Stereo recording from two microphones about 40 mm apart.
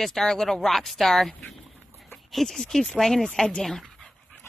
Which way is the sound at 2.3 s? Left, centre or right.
Centre.